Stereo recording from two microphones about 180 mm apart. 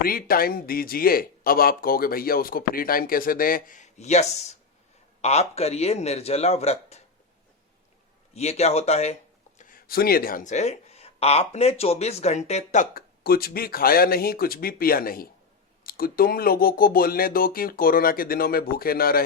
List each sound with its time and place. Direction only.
0.0 s speech: 55° left (ahead or behind); by 7.0 s 35° left (ahead or behind)
8.3 s speech: 35° left (ahead or behind)
9.6 s speech: 50° left (ahead or behind)